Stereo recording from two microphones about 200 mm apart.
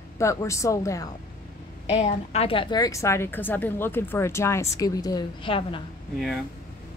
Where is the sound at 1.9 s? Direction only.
30° left (ahead or behind).